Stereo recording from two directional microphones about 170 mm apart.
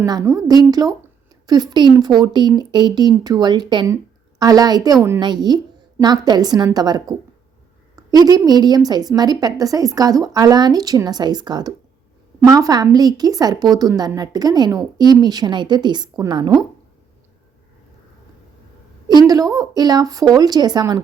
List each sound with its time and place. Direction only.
0.0 s a woman's voice: 20° right (ahead or behind)
19.3 s a woman's voice: 20° right (ahead or behind)